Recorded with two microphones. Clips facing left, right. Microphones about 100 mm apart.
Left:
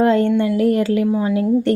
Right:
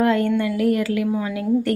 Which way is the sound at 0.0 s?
30° left (ahead or behind).